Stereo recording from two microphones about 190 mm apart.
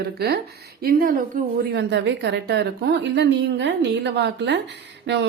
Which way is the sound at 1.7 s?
65° right (ahead or behind).